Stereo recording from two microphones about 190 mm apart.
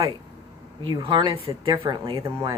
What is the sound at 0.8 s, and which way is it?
Speech, 25° right (ahead or behind).